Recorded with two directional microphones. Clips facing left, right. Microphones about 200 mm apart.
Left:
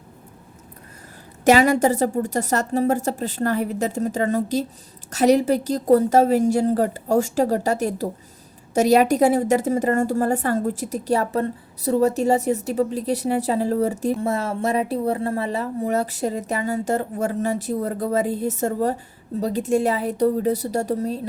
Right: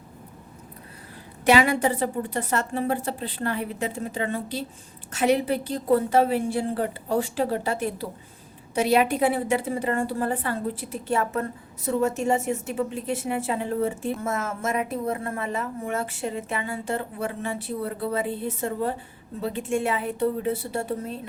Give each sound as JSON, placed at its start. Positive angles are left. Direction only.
{"t": 1.5, "sound": "a woman's voice", "side_deg": 40}